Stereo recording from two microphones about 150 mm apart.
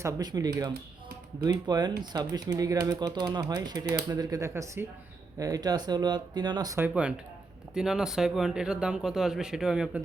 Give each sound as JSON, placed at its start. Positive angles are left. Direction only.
{"t": 0.0, "sound": "speech", "side_deg": -25}
{"t": 6.7, "sound": "speech", "side_deg": -10}